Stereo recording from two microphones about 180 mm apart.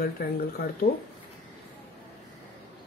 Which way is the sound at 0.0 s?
55° left (ahead or behind).